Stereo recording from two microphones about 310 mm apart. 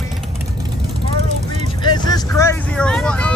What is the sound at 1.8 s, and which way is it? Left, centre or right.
Vehicle, centre.